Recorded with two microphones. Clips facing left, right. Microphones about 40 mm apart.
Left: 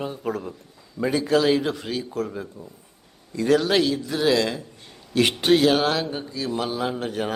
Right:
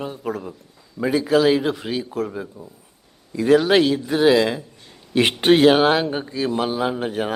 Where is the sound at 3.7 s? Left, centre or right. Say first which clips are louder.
Right 5 dB; right.